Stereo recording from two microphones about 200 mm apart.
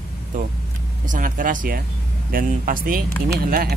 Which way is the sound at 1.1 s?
40° right (ahead or behind).